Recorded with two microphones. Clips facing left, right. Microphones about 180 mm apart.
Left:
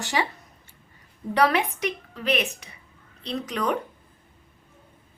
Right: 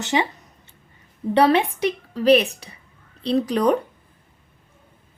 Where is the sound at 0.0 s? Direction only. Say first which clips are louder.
Right 5 dB; 20° right (ahead or behind).